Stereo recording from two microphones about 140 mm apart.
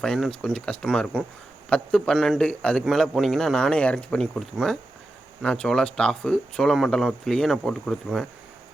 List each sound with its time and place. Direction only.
0.0 s a man's voice: 5° left (ahead or behind)